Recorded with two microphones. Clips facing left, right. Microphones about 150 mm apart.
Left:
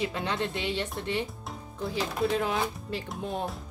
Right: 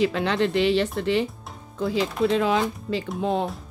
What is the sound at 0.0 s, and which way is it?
Speech, 90° right.